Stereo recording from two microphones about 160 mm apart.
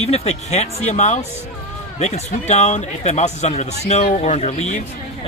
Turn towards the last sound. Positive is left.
turn(degrees=45)  # may be behind; listen again after turning